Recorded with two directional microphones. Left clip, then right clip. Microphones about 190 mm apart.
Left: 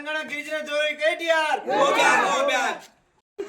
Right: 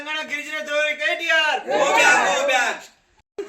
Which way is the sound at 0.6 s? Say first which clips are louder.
Right 4 dB; 25° left (ahead or behind).